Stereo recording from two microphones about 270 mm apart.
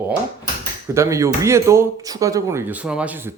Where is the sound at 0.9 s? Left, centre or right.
Centre.